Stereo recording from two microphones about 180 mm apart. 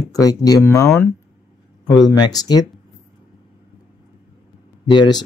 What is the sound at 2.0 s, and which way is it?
Speech, 20° left (ahead or behind).